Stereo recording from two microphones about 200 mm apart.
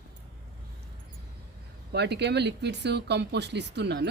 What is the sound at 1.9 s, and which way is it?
Speech, 55° right (ahead or behind).